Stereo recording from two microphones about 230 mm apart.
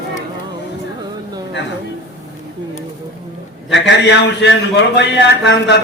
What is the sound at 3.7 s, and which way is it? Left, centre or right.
A man's voice, left.